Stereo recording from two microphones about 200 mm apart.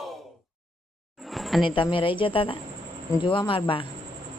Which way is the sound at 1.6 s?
25° left (ahead or behind).